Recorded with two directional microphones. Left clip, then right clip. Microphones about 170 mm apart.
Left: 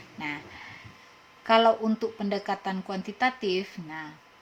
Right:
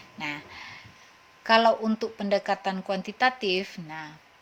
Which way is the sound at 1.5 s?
40° right (ahead or behind).